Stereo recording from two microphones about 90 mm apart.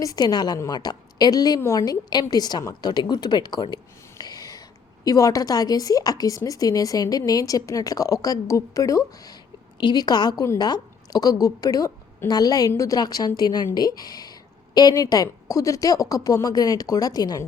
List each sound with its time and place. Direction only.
0.0 s speech: 45° left (ahead or behind)
4.2 s a sound: 45° left (ahead or behind)
5.0 s speech: 40° left (ahead or behind)